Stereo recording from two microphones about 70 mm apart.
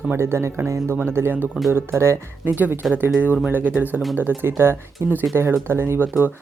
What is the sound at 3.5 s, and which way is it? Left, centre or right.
Speech, right.